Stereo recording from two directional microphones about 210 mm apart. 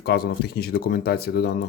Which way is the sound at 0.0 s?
50° left (ahead or behind).